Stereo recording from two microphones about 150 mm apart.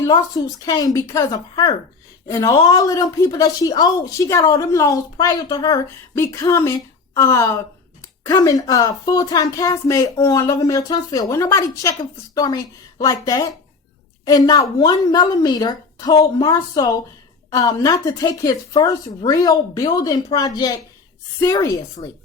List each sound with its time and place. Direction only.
0.0 s a woman's voice: 25° left (ahead or behind)